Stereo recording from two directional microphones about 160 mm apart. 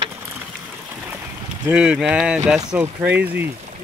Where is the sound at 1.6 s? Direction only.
5° right (ahead or behind).